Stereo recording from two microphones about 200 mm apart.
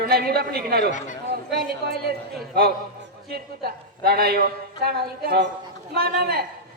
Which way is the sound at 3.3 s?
50° right (ahead or behind).